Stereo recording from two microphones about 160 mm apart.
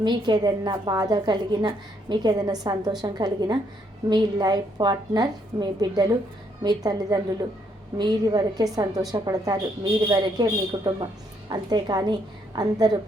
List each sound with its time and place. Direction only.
0.0 s a woman's voice: 25° right (ahead or behind)